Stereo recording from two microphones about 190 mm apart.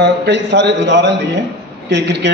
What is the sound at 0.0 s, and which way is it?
A man's voice, 65° right (ahead or behind).